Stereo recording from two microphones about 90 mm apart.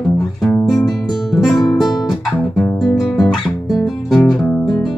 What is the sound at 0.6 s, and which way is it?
Music, 5° left (ahead or behind).